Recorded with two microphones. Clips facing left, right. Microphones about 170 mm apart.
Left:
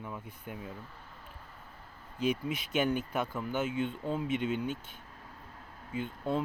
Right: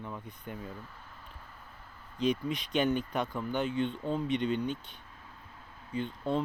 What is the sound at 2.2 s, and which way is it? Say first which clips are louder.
Speech: right 1 dB; 5° left (ahead or behind).